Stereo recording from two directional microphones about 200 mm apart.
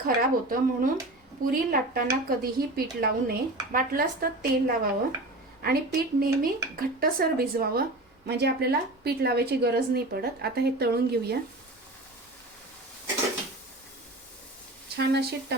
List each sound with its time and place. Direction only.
0.0 s speech: 45° right (ahead or behind)
14.9 s a woman's voice: 55° right (ahead or behind)